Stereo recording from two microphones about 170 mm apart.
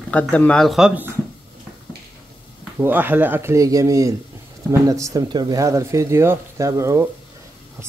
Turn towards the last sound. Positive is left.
turn(degrees=-15)  # may be behind; listen again after turning